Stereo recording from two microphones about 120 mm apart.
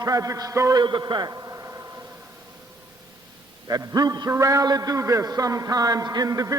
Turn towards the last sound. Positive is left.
turn(degrees=-30)  # may be behind; listen again after turning